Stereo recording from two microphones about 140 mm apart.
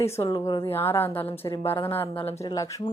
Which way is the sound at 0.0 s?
20° left (ahead or behind).